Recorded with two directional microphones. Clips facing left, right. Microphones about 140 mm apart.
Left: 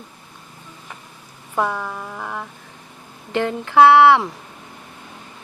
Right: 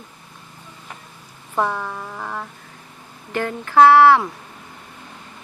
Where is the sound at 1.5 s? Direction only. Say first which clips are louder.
Even; 5° left (ahead or behind).